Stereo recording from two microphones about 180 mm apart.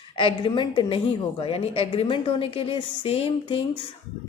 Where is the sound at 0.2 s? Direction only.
30° left (ahead or behind).